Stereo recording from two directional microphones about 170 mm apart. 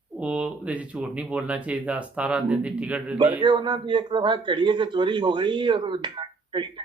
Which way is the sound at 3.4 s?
25° right (ahead or behind).